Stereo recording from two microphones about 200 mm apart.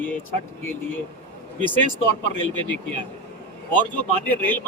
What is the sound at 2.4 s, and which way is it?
A man's voice, 10° left (ahead or behind).